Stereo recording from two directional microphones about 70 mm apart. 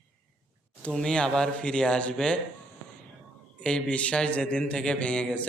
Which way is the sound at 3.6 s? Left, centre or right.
Centre.